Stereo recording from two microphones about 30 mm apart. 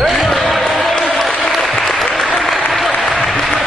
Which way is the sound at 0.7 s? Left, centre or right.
Centre.